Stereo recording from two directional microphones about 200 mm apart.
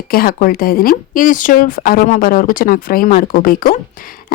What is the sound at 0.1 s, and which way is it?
Speech, 45° left (ahead or behind).